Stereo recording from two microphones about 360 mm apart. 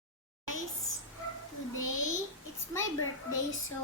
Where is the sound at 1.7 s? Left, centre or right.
Left.